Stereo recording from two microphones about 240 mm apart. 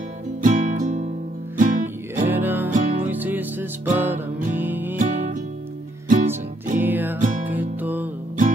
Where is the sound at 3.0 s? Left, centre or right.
Centre.